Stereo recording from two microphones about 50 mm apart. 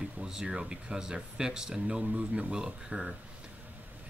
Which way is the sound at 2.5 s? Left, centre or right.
Centre.